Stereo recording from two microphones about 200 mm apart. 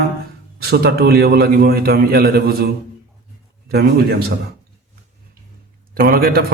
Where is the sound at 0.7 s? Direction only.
50° right (ahead or behind).